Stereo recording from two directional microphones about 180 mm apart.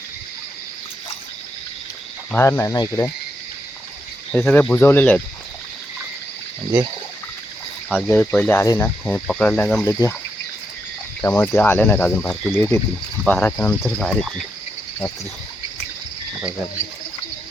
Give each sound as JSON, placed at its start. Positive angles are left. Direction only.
{"t": 2.3, "sound": "speech", "side_deg": 15}
{"t": 4.3, "sound": "speech", "side_deg": 5}
{"t": 7.9, "sound": "speech", "side_deg": 10}
{"t": 9.0, "sound": "cricket", "side_deg": 5}
{"t": 9.8, "sound": "speech", "side_deg": 15}
{"t": 11.2, "sound": "speech", "side_deg": 10}
{"t": 13.2, "sound": "cricket", "side_deg": 5}